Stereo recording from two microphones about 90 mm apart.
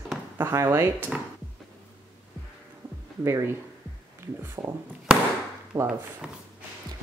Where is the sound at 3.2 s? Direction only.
30° right (ahead or behind).